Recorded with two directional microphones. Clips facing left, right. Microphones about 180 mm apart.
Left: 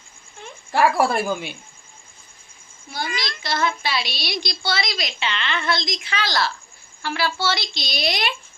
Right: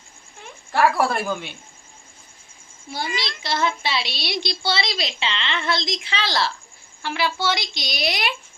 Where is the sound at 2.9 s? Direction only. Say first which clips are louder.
Even; 30° right (ahead or behind).